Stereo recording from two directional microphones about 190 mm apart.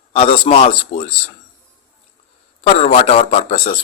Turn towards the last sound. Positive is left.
turn(degrees=35)  # may be behind; listen again after turning